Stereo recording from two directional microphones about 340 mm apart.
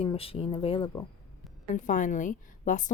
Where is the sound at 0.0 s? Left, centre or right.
Centre.